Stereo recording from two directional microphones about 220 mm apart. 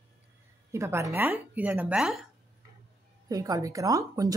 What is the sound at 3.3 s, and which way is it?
Speech, 15° right (ahead or behind).